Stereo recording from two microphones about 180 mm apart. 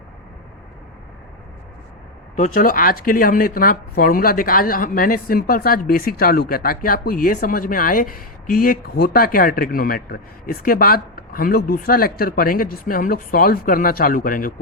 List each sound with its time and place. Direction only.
2.3 s speech: 45° left (ahead or behind)